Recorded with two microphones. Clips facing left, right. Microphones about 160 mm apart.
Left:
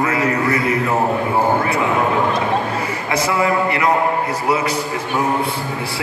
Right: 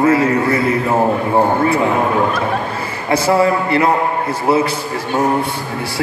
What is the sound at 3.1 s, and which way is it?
Speech, 30° right (ahead or behind).